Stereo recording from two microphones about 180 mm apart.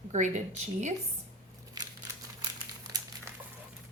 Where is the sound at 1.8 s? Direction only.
20° right (ahead or behind).